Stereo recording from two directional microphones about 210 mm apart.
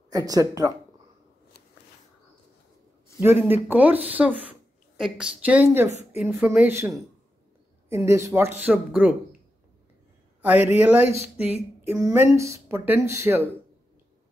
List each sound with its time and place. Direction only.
0.1 s speech: 15° right (ahead or behind)
3.2 s speech: 10° right (ahead or behind)
10.4 s speech: 10° right (ahead or behind)